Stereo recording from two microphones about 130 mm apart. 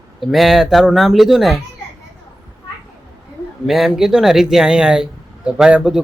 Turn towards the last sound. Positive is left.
turn(degrees=-5)  # may be behind; listen again after turning